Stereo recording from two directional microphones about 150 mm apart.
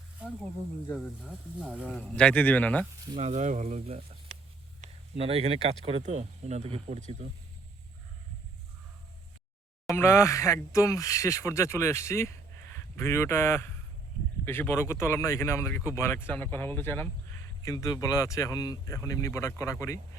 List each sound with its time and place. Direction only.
1.3 s speech: 5° right (ahead or behind)
1.9 s speech: 5° left (ahead or behind)
3.2 s speech: 50° right (ahead or behind)
4.8 s a sound: 40° right (ahead or behind)
6.0 s speech: 50° right (ahead or behind)
9.9 s speech: 15° left (ahead or behind)